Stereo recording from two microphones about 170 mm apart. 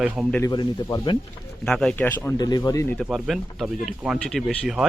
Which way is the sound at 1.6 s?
5° left (ahead or behind).